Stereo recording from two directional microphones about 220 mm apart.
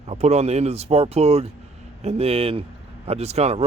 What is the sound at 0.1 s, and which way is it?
Speech, 30° right (ahead or behind).